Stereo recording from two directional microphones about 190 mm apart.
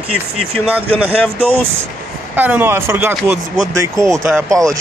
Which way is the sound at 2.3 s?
10° right (ahead or behind).